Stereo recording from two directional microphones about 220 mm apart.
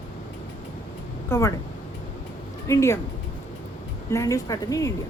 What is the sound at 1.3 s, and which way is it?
Speech, 15° left (ahead or behind).